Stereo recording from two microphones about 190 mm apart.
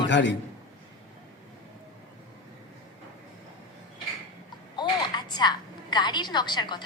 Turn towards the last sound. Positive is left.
turn(degrees=25)  # may be behind; listen again after turning